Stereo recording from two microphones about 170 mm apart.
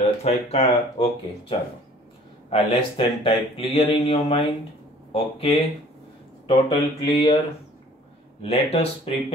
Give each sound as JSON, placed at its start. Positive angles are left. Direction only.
{"t": 0.0, "sound": "speech", "side_deg": 40}
{"t": 2.5, "sound": "speech", "side_deg": 35}
{"t": 7.2, "sound": "speech", "side_deg": 35}